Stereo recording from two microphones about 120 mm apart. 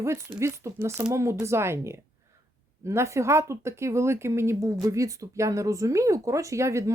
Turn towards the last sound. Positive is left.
turn(degrees=-25)  # may be behind; listen again after turning